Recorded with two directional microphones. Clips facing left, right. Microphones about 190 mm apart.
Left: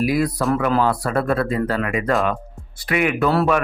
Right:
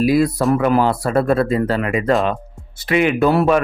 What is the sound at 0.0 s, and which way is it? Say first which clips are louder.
Speech: right 4 dB; 30° right (ahead or behind).